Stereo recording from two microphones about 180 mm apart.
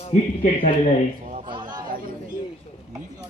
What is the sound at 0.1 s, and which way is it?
Speech, 40° left (ahead or behind).